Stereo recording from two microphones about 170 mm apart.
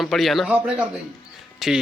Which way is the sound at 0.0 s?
Centre (ahead or behind).